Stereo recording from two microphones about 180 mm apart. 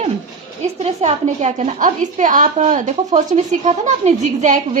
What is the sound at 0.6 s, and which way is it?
A woman's voice, 35° right (ahead or behind).